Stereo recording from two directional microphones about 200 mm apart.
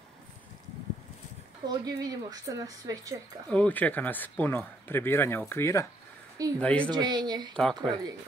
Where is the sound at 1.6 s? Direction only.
20° right (ahead or behind).